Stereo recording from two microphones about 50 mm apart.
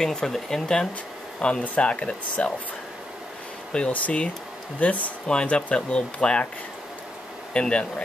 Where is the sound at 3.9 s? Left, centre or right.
Left.